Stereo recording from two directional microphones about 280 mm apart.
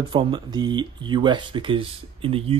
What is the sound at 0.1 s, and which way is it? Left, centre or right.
Speech, centre.